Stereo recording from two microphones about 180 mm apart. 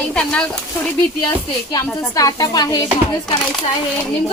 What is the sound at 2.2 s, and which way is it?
Speech, 20° left (ahead or behind).